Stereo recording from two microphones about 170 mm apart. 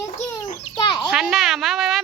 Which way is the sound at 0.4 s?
40° left (ahead or behind).